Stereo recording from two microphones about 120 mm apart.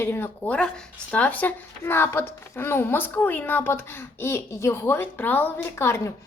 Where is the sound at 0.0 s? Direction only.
20° left (ahead or behind).